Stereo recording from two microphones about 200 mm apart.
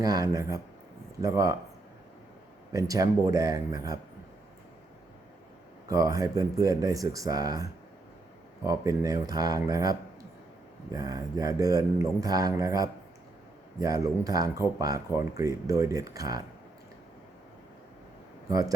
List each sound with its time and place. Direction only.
0.0 s speech: 20° right (ahead or behind)
2.7 s speech: 15° right (ahead or behind)
5.9 s speech: 15° right (ahead or behind)
18.4 s speech: 20° right (ahead or behind)